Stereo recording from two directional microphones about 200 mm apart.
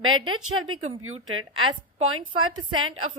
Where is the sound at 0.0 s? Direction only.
90° right.